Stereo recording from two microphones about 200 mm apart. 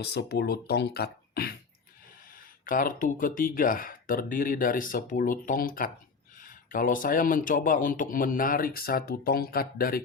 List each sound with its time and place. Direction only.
0.0 s speech: 55° left (ahead or behind)
2.6 s speech: 45° left (ahead or behind)